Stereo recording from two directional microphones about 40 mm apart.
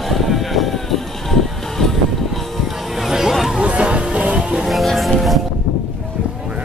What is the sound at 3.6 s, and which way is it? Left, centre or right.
Music, right.